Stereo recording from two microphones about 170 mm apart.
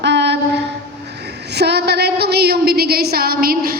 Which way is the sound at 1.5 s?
75° right (ahead or behind).